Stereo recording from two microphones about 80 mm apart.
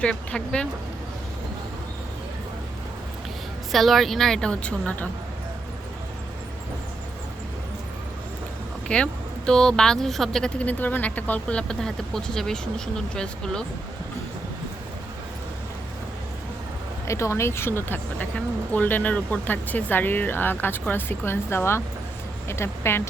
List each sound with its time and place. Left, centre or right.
0.0 s speech: centre
3.7 s a woman's voice: centre
8.9 s speech: centre
10.6 s speech: centre
17.1 s speech: left